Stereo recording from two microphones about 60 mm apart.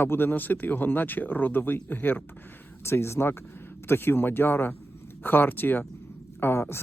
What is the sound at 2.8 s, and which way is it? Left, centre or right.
Speech, left.